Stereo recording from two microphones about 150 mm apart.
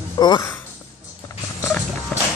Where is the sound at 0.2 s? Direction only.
30° left (ahead or behind).